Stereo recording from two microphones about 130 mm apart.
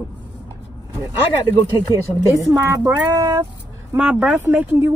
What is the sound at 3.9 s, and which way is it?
Speech, 10° right (ahead or behind).